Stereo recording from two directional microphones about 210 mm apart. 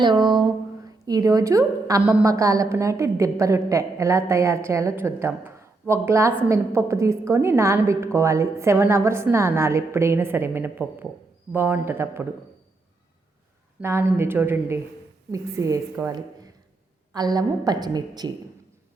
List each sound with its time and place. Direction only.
0.0 s a woman's voice: 20° right (ahead or behind)
13.8 s a woman's voice: 10° right (ahead or behind)